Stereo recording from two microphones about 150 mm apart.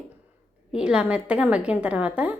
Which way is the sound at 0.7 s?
5° right (ahead or behind).